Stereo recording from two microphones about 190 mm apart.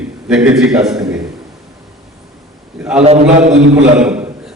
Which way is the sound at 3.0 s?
35° right (ahead or behind).